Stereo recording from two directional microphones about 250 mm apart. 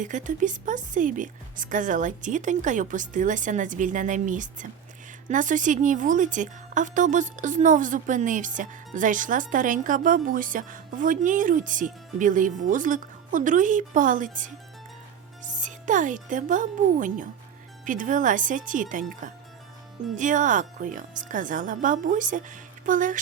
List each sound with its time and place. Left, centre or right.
0.0 s a woman's voice: right
20.1 s a woman's voice: right